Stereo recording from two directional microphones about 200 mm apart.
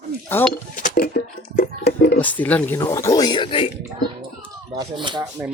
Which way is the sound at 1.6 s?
50° left (ahead or behind).